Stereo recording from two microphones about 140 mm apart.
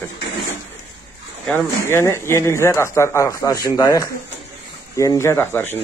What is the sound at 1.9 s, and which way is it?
Speech, 20° left (ahead or behind).